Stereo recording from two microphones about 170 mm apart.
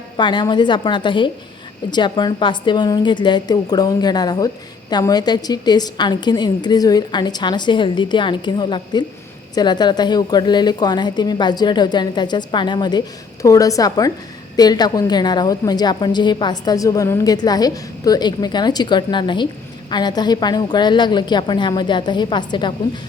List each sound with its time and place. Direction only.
0.2 s a woman's voice: 25° left (ahead or behind)